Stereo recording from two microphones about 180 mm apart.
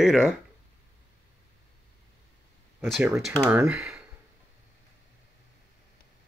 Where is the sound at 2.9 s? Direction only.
5° right (ahead or behind).